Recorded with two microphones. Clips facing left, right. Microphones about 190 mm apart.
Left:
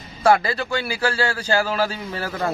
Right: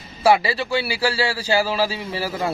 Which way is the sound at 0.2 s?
10° right (ahead or behind).